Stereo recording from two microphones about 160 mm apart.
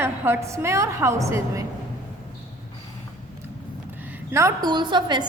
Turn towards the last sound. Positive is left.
turn(degrees=-30)  # may be behind; listen again after turning